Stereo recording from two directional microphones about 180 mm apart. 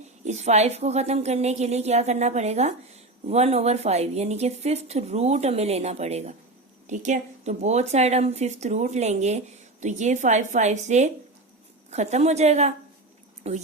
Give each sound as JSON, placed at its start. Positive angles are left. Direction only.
{"t": 0.3, "sound": "a woman's voice", "side_deg": -40}